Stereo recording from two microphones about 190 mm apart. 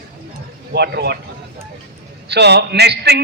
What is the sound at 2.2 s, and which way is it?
Speech, 60° right (ahead or behind).